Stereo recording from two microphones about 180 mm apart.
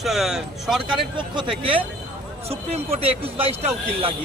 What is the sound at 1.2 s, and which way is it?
A man's voice, 25° right (ahead or behind).